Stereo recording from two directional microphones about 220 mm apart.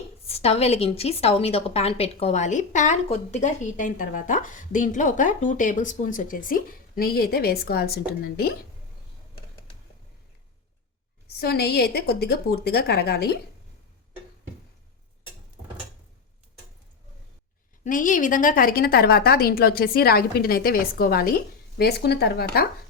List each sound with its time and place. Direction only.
0.3 s a woman's voice: 25° left (ahead or behind); by 8.5 s 45° left (ahead or behind)
11.3 s a woman's voice: 45° left (ahead or behind)
17.8 s a woman's voice: 35° left (ahead or behind)